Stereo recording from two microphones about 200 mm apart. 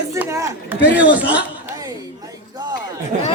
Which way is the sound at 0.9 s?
5° right (ahead or behind).